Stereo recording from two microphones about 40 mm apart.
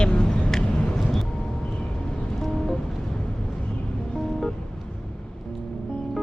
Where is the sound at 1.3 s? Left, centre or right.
Centre.